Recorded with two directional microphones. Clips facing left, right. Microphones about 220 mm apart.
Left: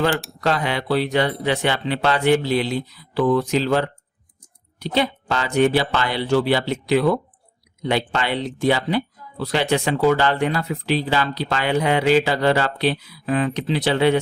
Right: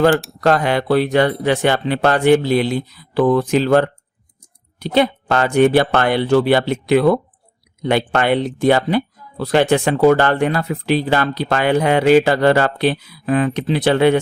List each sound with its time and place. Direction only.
0.1 s speech: centre (ahead or behind)
0.4 s speech: 50° right (ahead or behind)